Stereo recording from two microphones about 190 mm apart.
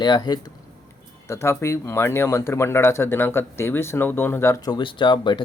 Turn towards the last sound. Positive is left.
turn(degrees=25)  # may be behind; listen again after turning